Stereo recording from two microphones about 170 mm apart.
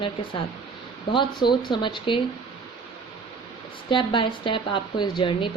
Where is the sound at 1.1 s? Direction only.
25° left (ahead or behind).